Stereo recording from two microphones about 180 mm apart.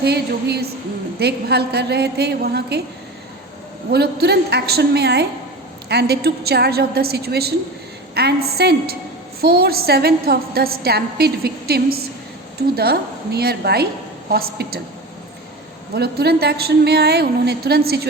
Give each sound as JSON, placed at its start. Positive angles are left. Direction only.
{"t": 0.0, "sound": "a woman's voice", "side_deg": -65}
{"t": 3.9, "sound": "a woman's voice", "side_deg": -60}
{"t": 16.0, "sound": "a woman's voice", "side_deg": -60}